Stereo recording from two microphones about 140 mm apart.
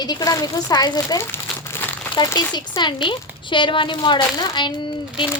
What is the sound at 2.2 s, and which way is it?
Speech, 30° left (ahead or behind).